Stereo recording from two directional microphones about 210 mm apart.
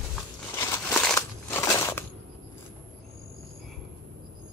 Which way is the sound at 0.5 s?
15° left (ahead or behind).